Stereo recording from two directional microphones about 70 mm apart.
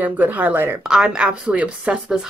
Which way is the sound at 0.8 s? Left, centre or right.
Centre.